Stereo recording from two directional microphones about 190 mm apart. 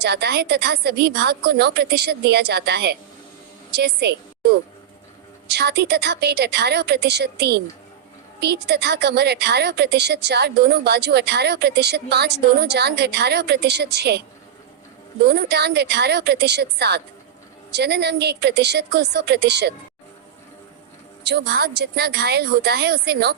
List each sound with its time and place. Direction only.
0.0 s a woman's voice: 60° right (ahead or behind)
15.2 s a woman's voice: 60° right (ahead or behind)
21.2 s a woman's voice: 60° right (ahead or behind)